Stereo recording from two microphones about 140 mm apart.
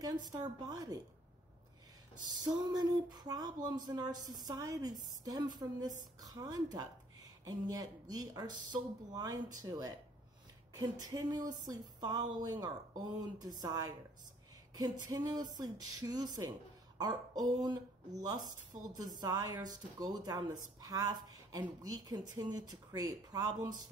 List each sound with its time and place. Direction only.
0.0 s speech: 25° right (ahead or behind)
2.4 s speech: 30° right (ahead or behind)